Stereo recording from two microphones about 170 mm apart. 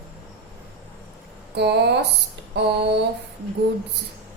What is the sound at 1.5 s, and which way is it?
Speech, 75° right (ahead or behind).